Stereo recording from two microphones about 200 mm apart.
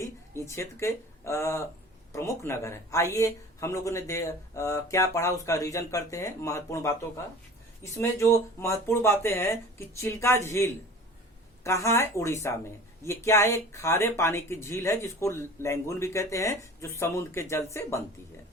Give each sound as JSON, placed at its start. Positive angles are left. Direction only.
{"t": 0.0, "sound": "speech", "side_deg": 15}